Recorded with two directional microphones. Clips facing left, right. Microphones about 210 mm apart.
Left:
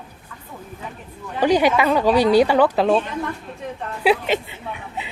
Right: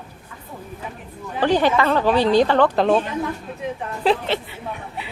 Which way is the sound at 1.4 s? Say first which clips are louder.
Left 1 dB; 10° left (ahead or behind).